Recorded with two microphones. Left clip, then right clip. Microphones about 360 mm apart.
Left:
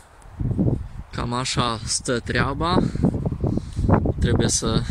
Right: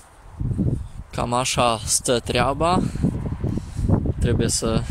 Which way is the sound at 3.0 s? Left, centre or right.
Left.